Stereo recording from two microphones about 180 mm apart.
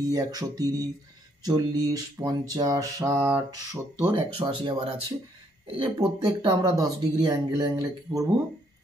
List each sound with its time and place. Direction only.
0.1 s mantra: 20° right (ahead or behind)